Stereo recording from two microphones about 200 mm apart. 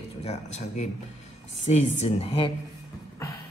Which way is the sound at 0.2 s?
35° left (ahead or behind).